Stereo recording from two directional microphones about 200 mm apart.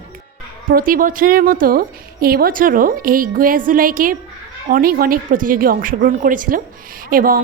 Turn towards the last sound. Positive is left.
turn(degrees=-45)  # may be behind; listen again after turning